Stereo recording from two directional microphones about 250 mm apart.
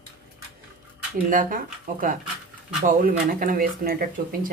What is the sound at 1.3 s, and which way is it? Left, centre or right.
Speech, right.